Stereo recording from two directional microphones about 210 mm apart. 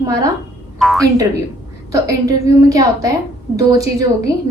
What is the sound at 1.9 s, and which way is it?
A woman's voice, 15° right (ahead or behind).